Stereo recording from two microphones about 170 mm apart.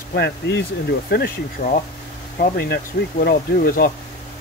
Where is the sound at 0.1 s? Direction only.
75° left (ahead or behind).